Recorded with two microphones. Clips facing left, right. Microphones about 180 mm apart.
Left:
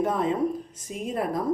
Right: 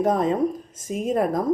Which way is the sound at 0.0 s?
40° right (ahead or behind).